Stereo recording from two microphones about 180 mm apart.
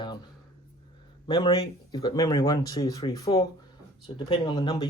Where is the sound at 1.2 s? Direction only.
30° left (ahead or behind).